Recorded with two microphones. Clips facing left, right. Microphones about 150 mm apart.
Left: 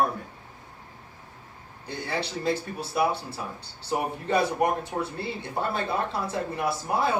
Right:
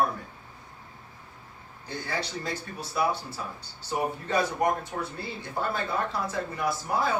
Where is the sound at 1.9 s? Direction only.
30° left (ahead or behind).